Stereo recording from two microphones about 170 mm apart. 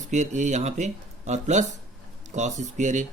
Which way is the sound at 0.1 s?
45° right (ahead or behind).